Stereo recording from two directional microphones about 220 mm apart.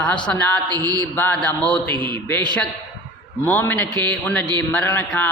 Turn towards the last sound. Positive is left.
turn(degrees=5)  # may be behind; listen again after turning